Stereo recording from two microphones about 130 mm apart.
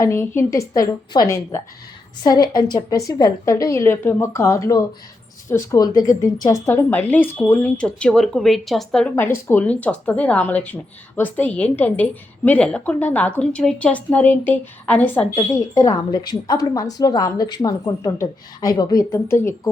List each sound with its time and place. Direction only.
0.0 s a woman's voice: 20° left (ahead or behind)
6.9 s speech: 15° left (ahead or behind)
9.1 s speech: 15° left (ahead or behind)
15.4 s a woman's voice: 25° left (ahead or behind)